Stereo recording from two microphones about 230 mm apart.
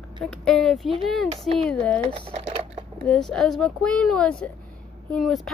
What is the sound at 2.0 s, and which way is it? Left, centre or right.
Typing, right.